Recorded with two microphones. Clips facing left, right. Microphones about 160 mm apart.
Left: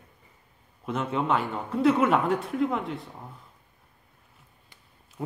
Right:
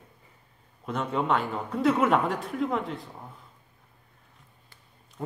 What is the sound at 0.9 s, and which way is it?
Speech, centre (ahead or behind).